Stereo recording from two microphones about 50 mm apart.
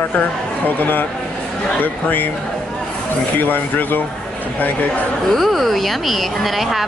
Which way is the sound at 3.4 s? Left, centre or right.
Left.